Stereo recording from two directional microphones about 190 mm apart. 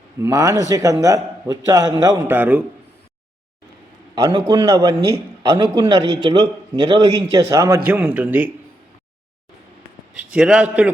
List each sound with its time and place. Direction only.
0.2 s a man's voice: 15° right (ahead or behind)
4.1 s a man's voice: 25° right (ahead or behind)
10.2 s a man's voice: 5° right (ahead or behind)